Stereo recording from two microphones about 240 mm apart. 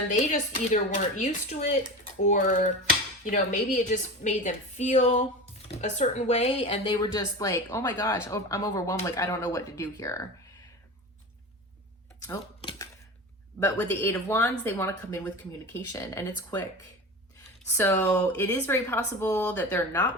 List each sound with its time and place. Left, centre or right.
0.1 s a woman's voice: left; by 10.2 s centre
13.7 s a woman's voice: centre
17.7 s a woman's voice: centre